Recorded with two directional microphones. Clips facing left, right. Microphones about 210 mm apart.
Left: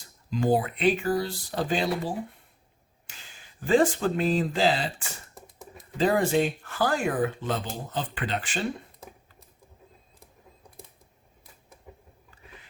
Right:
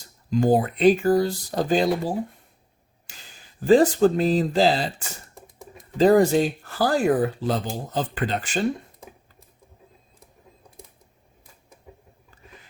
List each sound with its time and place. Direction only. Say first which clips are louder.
0.3 s speech: right 5 dB; 45° right (ahead or behind)
3.6 s speech: right 6 dB; 40° right (ahead or behind)